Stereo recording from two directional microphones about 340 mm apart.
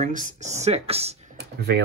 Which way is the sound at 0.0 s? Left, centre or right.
Right.